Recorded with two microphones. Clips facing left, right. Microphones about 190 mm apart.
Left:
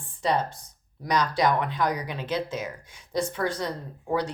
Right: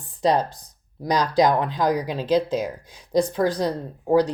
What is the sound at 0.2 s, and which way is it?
Speech, 35° right (ahead or behind).